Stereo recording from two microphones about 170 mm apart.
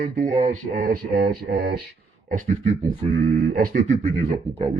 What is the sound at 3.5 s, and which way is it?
Speech, 60° right (ahead or behind).